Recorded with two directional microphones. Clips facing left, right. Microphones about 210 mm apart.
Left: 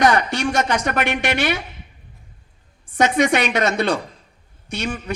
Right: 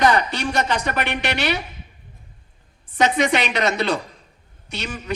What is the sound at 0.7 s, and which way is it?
Speech, 50° left (ahead or behind).